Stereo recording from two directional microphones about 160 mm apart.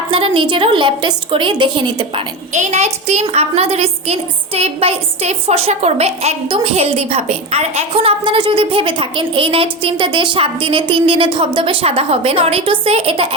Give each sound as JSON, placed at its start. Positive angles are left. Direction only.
{"t": 0.1, "sound": "a woman's voice", "side_deg": -35}
{"t": 2.5, "sound": "a woman's voice", "side_deg": -50}